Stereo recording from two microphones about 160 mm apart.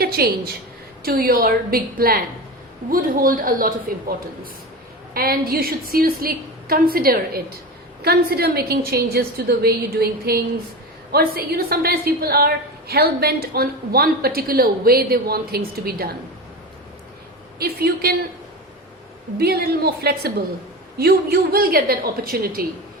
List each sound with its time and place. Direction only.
0.0 s a woman's voice: 70° right (ahead or behind)
5.1 s a woman's voice: 70° right (ahead or behind)
17.6 s a woman's voice: 75° right (ahead or behind)
19.4 s a woman's voice: 80° right